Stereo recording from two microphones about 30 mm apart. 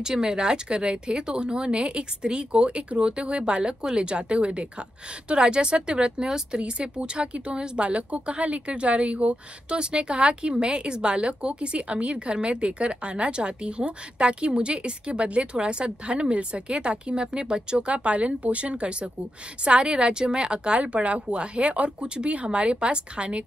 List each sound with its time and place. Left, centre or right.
0.0 s speech: centre; by 9.4 s right
9.7 s speech: right
18.1 s a woman's voice: right
20.8 s speech: right
22.3 s speech: right